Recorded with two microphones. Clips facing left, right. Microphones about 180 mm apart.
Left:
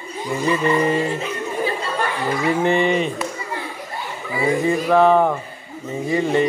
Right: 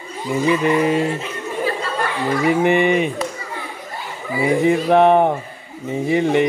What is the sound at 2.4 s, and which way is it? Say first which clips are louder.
Speech: right 2 dB; 15° right (ahead or behind).